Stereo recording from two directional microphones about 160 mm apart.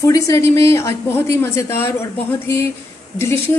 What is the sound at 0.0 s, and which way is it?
A woman's voice, 20° left (ahead or behind).